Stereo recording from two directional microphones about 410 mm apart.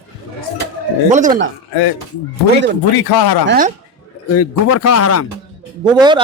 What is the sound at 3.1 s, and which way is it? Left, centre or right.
Speech, left.